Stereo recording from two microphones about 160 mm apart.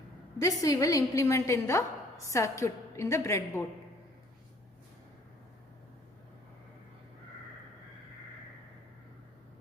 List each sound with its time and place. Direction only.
0.3 s a woman's voice: 20° left (ahead or behind)